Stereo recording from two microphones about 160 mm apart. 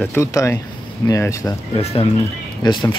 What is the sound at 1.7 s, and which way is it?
Speech, 35° left (ahead or behind).